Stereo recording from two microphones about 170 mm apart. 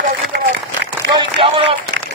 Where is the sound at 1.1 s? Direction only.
30° right (ahead or behind).